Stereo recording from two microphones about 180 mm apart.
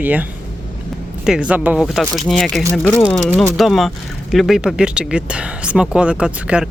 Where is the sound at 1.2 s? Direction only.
5° right (ahead or behind).